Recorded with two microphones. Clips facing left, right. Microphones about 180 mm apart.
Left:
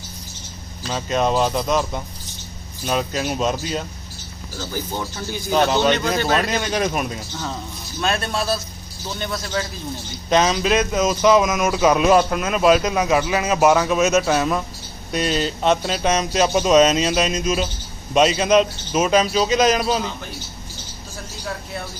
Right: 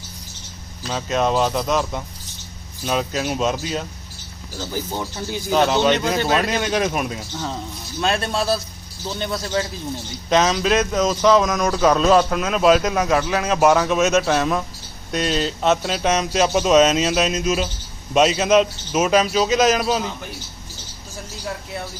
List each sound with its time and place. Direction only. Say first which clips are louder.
0.9 s speech: even; centre (ahead or behind)
5.5 s speech: even; centre (ahead or behind)
8.0 s speech: right 1 dB; 30° right (ahead or behind)
10.2 s speech: even; centre (ahead or behind)